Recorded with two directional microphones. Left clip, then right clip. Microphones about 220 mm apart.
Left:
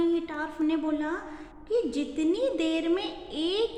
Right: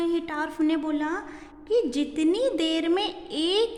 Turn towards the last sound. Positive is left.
turn(degrees=-50)  # may be behind; listen again after turning